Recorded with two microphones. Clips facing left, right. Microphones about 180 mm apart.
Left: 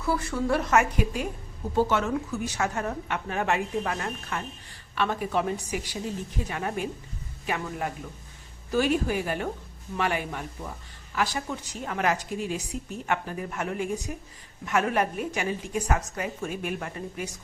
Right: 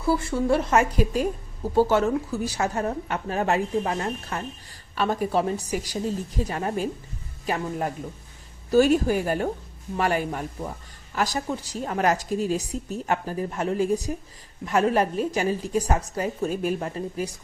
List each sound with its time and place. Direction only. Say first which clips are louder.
0.0 s a woman's voice: right 4 dB; 30° right (ahead or behind)